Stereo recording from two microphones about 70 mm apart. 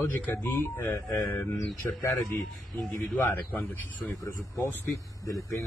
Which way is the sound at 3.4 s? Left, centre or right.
Left.